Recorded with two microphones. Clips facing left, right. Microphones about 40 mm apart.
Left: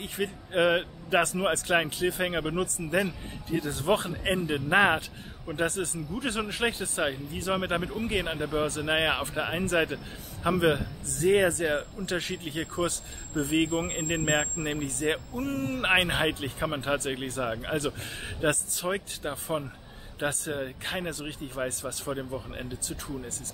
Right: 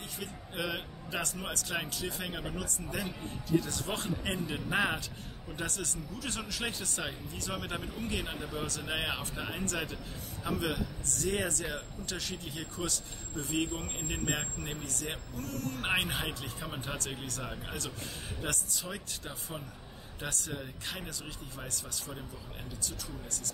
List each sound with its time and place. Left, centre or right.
0.0 s speech: left